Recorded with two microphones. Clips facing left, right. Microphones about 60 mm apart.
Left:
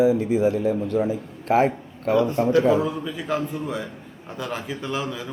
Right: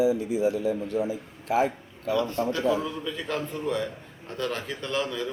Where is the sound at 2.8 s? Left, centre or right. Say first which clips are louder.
Left 5 dB; centre.